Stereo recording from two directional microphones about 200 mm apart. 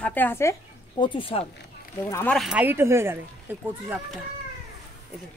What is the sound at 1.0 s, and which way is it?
Speech, 25° left (ahead or behind).